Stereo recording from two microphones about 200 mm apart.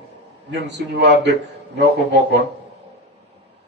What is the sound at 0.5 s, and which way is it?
Speech, 60° right (ahead or behind).